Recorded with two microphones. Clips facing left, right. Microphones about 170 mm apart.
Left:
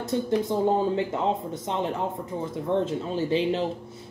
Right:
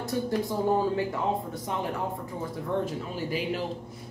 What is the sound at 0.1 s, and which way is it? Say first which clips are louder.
Speech: left 4 dB; 20° left (ahead or behind).